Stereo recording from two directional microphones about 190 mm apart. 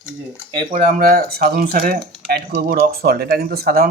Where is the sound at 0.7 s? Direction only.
40° right (ahead or behind).